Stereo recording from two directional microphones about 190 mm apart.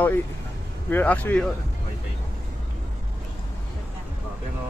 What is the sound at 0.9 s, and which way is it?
Speech, 10° left (ahead or behind).